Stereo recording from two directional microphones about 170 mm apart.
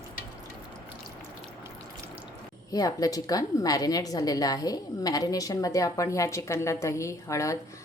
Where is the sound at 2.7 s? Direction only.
20° left (ahead or behind).